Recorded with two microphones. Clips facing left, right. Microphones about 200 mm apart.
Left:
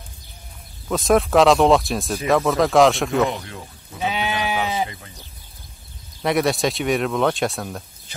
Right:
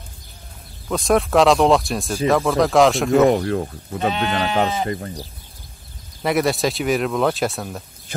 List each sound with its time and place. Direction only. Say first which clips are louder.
0.8 s speech: left 1 dB; centre (ahead or behind)
3.3 s speech: right 11 dB; 50° right (ahead or behind)
4.1 s speech: right 1 dB; 10° left (ahead or behind)
4.8 s speech: right 10 dB; 50° right (ahead or behind)
6.2 s speech: right 1 dB; centre (ahead or behind)